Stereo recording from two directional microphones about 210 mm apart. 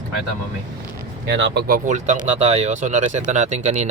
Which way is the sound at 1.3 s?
60° right (ahead or behind).